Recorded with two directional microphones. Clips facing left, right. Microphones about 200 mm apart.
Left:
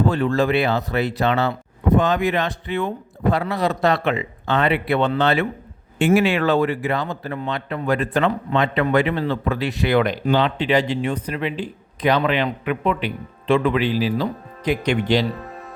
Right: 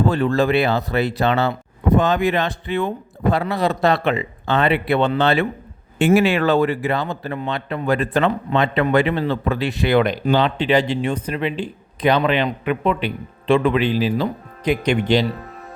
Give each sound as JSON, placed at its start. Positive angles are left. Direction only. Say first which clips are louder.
{"t": 0.1, "sound": "speech", "louder": "right 1 dB", "side_deg": -35}